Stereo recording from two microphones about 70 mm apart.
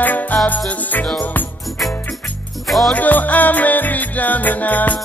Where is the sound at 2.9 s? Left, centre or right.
Left.